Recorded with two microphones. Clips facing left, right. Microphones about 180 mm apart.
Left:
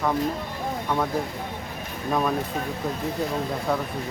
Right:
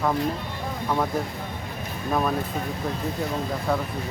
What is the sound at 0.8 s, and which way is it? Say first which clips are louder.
Speech: right 1 dB; 5° right (ahead or behind).